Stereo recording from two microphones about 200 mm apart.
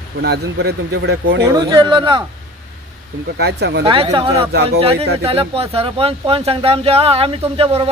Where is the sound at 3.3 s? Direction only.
55° right (ahead or behind).